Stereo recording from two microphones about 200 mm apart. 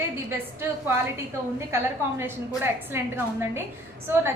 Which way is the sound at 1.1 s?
15° right (ahead or behind).